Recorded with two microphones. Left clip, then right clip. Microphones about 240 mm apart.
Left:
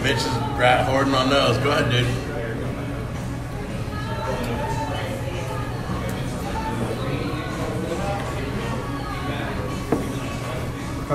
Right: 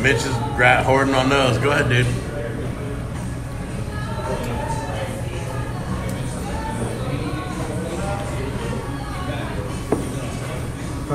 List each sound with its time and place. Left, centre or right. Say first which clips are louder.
0.0 s a man's voice: right 3 dB; left